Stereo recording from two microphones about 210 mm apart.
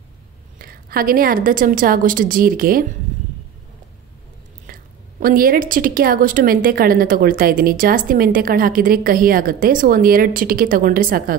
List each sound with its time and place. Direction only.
0.6 s a woman's voice: 45° right (ahead or behind)
5.2 s a woman's voice: 45° right (ahead or behind)